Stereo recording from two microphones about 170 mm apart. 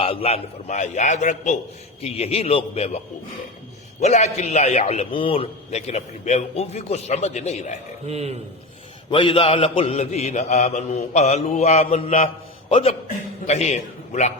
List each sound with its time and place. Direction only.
0.0 s a man's voice: 35° left (ahead or behind)
4.0 s a man's voice: 40° left (ahead or behind)
8.0 s speech: 40° right (ahead or behind)
9.0 s a man's voice: 30° left (ahead or behind)